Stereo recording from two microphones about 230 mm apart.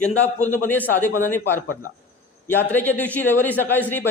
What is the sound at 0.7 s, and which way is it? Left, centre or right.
A man's voice, centre.